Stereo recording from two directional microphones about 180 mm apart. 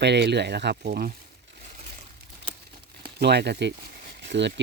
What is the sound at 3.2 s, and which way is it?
Speech, 70° right (ahead or behind).